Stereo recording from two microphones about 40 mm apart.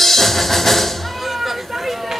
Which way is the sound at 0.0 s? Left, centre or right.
Centre.